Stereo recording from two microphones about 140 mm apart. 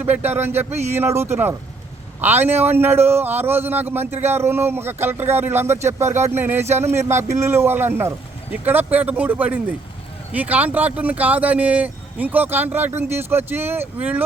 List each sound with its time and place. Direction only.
0.0 s a man's voice: 15° right (ahead or behind)